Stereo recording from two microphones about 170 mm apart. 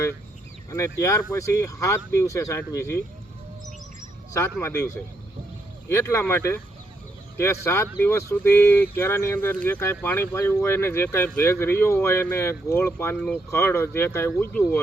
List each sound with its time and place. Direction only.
0.7 s speech: 20° left (ahead or behind)
4.6 s speech: 15° left (ahead or behind)